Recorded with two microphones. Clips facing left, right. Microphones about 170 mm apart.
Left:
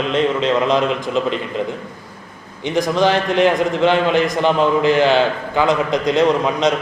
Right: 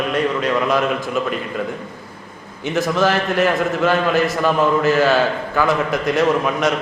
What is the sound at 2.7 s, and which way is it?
A man's voice, 15° left (ahead or behind).